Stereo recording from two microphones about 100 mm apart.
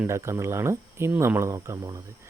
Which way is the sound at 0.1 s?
30° right (ahead or behind).